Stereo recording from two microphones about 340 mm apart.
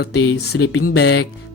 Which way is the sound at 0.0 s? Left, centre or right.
Left.